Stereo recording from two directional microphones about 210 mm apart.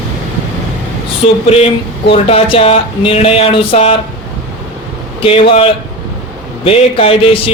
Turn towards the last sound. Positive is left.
turn(degrees=25)  # may be behind; listen again after turning